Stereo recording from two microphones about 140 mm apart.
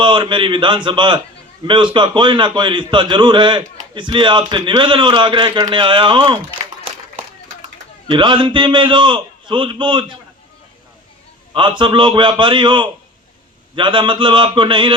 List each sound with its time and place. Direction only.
0.0 s a man's voice: 35° right (ahead or behind)
8.0 s a man's voice: 35° right (ahead or behind)
11.5 s a man's voice: 35° right (ahead or behind)